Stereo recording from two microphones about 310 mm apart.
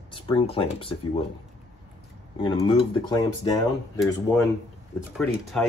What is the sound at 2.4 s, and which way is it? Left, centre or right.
Speech, centre.